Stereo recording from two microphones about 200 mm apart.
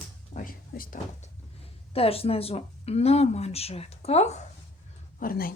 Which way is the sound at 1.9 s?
30° left (ahead or behind).